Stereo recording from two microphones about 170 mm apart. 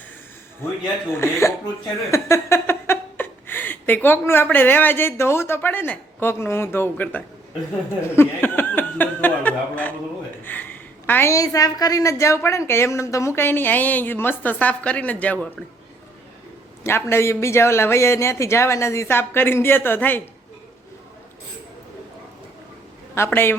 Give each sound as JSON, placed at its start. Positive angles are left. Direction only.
{"t": 1.2, "sound": "a woman's voice", "side_deg": 15}
{"t": 8.1, "sound": "chuckle", "side_deg": 10}
{"t": 10.4, "sound": "a woman's voice", "side_deg": 10}
{"t": 16.8, "sound": "a woman's voice", "side_deg": 15}
{"t": 23.1, "sound": "a woman's voice", "side_deg": 15}